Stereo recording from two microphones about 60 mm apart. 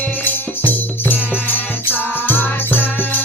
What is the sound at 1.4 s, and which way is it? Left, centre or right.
Music, left.